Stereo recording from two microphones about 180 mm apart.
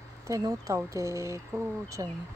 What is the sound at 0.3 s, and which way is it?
Speech, 20° right (ahead or behind).